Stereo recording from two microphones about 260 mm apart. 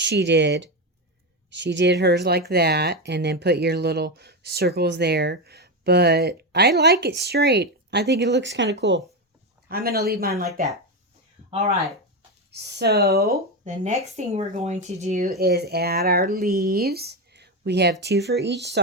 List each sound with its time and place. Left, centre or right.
0.0 s speech: right
12.5 s speech: right
15.4 s speech: right